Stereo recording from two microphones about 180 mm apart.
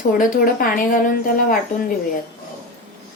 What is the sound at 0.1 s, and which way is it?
A woman's voice, 50° left (ahead or behind).